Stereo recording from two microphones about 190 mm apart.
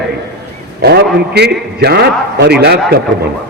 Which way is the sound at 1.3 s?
60° right (ahead or behind).